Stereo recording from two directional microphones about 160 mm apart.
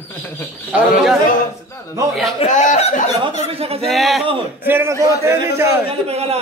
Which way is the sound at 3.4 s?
40° right (ahead or behind).